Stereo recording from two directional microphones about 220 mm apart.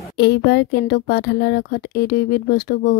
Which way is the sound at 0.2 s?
50° left (ahead or behind).